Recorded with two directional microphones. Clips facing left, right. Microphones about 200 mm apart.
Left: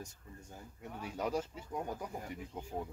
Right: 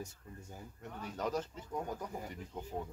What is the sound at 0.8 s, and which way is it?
Speech, 10° left (ahead or behind).